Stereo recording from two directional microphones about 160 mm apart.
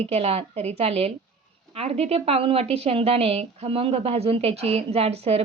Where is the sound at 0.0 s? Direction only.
40° right (ahead or behind).